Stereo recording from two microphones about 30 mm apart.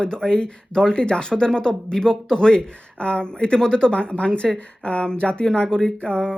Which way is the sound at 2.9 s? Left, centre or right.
Left.